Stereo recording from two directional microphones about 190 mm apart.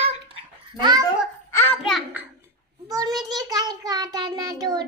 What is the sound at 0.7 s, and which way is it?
Speech, 20° right (ahead or behind).